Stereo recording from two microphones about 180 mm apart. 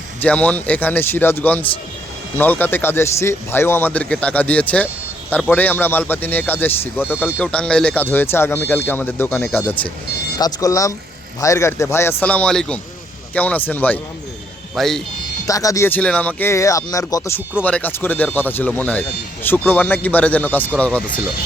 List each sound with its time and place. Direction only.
0.2 s speech: 5° left (ahead or behind)
15.4 s speech: 20° left (ahead or behind)